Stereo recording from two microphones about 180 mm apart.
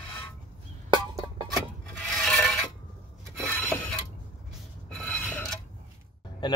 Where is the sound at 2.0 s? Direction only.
5° left (ahead or behind).